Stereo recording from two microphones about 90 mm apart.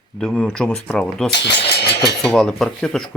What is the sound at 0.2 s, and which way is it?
Speech, 10° left (ahead or behind).